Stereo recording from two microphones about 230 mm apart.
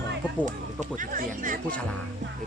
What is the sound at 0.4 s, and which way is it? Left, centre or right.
Speech, right.